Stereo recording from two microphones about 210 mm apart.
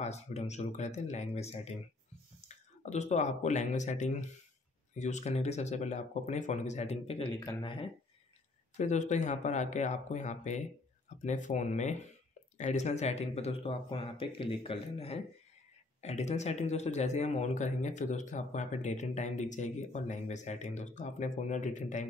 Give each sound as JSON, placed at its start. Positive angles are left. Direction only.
{"t": 0.0, "sound": "speech", "side_deg": 30}
{"t": 8.7, "sound": "speech", "side_deg": 35}